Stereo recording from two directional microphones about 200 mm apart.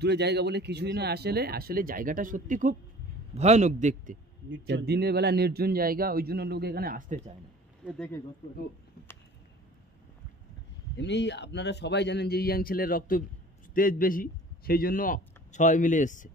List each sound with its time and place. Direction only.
0.0 s a man's voice: 55° right (ahead or behind); by 4.2 s 40° right (ahead or behind)
4.5 s speech: 60° right (ahead or behind); by 7.3 s 40° right (ahead or behind)
11.0 s a man's voice: 60° left (ahead or behind); by 16.3 s 40° left (ahead or behind)